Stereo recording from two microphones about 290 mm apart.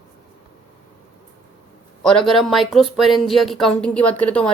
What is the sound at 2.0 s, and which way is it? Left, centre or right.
Speech, centre.